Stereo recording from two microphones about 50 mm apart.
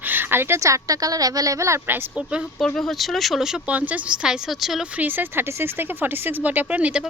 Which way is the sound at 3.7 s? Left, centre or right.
Right.